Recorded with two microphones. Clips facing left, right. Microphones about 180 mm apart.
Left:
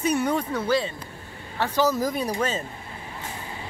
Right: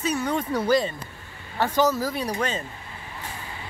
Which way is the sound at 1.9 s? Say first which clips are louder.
Left 1 dB; 15° left (ahead or behind).